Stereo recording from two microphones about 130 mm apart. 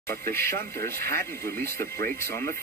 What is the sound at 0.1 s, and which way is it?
Speech, 20° left (ahead or behind).